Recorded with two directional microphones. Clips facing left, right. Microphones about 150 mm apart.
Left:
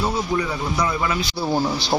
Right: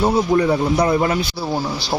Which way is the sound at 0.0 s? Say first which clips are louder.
Right 7 dB; 50° right (ahead or behind).